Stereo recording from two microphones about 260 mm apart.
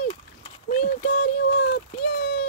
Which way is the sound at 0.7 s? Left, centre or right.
Left.